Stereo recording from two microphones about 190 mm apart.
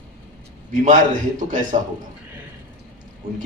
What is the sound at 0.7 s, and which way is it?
Speech, 40° right (ahead or behind).